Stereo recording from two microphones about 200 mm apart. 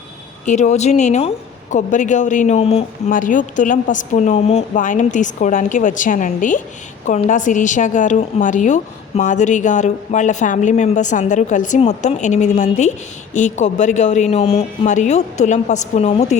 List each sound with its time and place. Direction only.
0.4 s a woman's voice: 35° left (ahead or behind)
3.1 s a woman's voice: 40° left (ahead or behind)